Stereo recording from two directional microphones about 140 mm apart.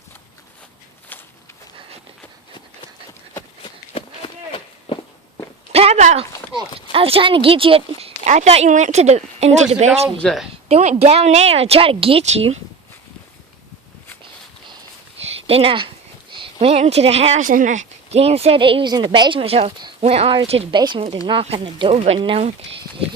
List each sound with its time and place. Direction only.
1.1 s a sound: 10° left (ahead or behind)
3.6 s walk: 40° left (ahead or behind)
5.7 s a sound: 50° right (ahead or behind)
6.9 s speech: 40° right (ahead or behind)
8.2 s speech: 55° right (ahead or behind)
15.4 s a woman's voice: 45° right (ahead or behind)
17.4 s speech: 70° right (ahead or behind); by 20.7 s 45° right (ahead or behind)
20.7 s a woman's voice: 35° right (ahead or behind)